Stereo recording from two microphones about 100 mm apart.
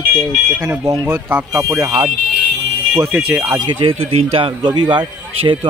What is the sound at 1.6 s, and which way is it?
Speech, 30° right (ahead or behind).